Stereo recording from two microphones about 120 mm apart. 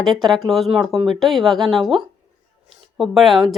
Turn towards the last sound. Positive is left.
turn(degrees=0)  # may be behind; listen again after turning